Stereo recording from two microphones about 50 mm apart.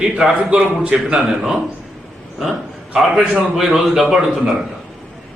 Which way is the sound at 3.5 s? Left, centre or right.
Centre.